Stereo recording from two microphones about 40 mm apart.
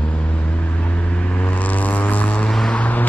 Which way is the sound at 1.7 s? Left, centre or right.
Left.